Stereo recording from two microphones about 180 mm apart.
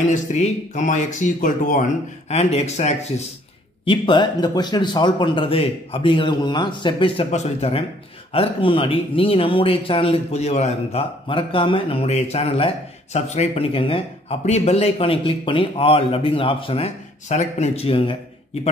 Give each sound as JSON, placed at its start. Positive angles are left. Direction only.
{"t": 0.1, "sound": "speech", "side_deg": 40}
{"t": 3.8, "sound": "speech", "side_deg": 25}